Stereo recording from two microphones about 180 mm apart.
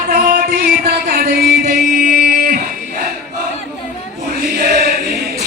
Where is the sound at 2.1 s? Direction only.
60° right (ahead or behind).